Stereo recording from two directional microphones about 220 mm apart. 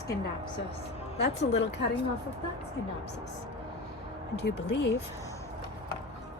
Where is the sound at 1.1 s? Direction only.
50° left (ahead or behind).